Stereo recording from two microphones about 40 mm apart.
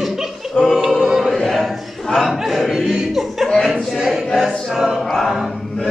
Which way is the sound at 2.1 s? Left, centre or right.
Centre.